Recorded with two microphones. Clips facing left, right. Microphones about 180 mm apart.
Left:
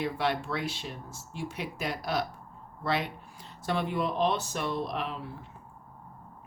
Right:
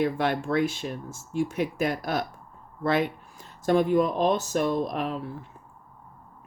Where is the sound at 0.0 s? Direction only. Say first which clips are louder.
Right 5 dB; 50° right (ahead or behind).